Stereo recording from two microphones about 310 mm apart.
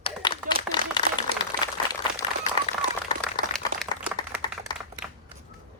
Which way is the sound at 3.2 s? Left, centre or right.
Centre.